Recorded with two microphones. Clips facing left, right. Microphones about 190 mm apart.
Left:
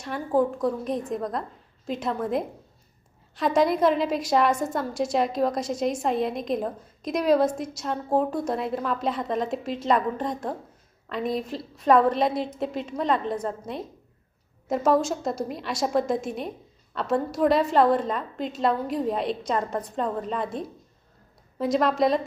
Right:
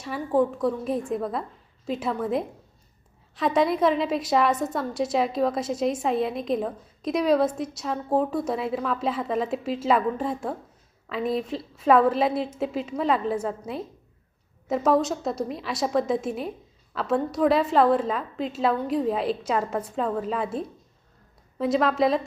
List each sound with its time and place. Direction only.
0.3 s a woman's voice: centre (ahead or behind)